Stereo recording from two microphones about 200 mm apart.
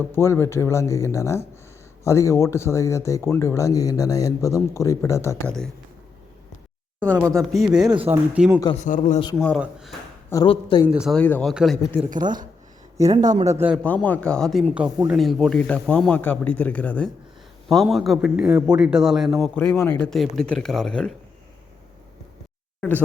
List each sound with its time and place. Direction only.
0.0 s speech: 10° left (ahead or behind)
7.3 s a man's voice: centre (ahead or behind)
7.9 s speech: 25° right (ahead or behind)
8.1 s speech: 10° right (ahead or behind)
8.7 s speech: 40° left (ahead or behind)
10.4 s speech: 25° left (ahead or behind)
10.9 s a man's voice: centre (ahead or behind)
12.2 s speech: 20° right (ahead or behind)
13.8 s a man's voice: 5° left (ahead or behind)
19.5 s a man's voice: 10° left (ahead or behind)
22.8 s speech: 10° left (ahead or behind)